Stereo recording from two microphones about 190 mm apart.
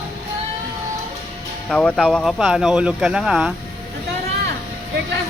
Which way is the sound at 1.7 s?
5° left (ahead or behind).